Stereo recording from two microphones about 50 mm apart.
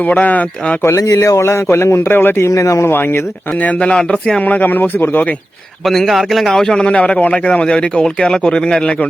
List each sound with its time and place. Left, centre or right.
0.0 s speech: left
0.8 s a man's voice: left
2.1 s speech: left
2.6 s speech: left
2.8 s speech: left
3.6 s speech: left
3.9 s speech: centre
4.4 s speech: left
5.8 s a man's voice: centre
6.8 s speech: left